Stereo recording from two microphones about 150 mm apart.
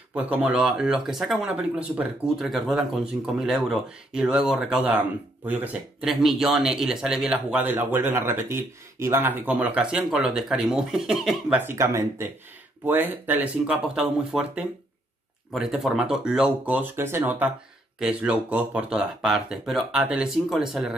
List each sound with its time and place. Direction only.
0.1 s speech: 10° right (ahead or behind)